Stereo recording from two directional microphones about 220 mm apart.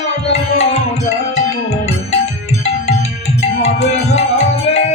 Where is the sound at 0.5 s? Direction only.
30° left (ahead or behind).